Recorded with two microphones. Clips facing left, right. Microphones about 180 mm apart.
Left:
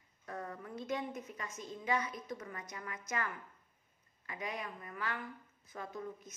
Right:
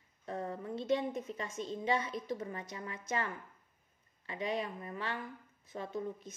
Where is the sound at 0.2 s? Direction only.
25° right (ahead or behind).